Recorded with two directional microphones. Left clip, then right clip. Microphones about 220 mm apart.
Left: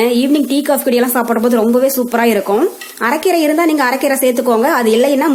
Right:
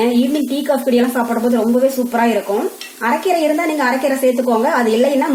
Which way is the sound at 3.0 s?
45° left (ahead or behind).